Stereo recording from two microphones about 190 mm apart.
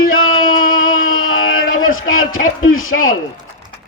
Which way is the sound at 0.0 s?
90° left.